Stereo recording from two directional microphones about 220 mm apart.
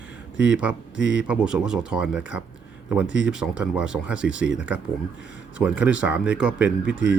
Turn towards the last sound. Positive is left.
turn(degrees=-5)  # may be behind; listen again after turning